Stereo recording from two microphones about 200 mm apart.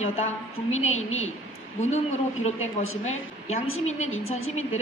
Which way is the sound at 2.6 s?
90° left.